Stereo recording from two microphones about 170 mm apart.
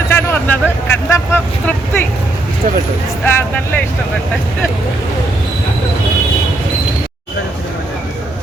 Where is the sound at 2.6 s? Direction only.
50° right (ahead or behind).